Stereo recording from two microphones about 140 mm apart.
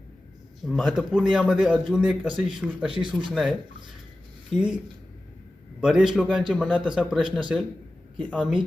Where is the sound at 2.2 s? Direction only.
35° right (ahead or behind).